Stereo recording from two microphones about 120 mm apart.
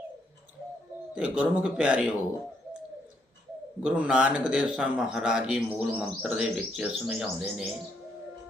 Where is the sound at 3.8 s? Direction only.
10° right (ahead or behind).